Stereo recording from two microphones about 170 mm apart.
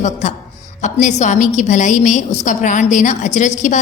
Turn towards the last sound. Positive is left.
turn(degrees=45)  # may be behind; listen again after turning